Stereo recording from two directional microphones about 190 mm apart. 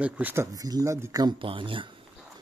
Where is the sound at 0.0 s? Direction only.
10° right (ahead or behind); by 1.9 s 25° right (ahead or behind).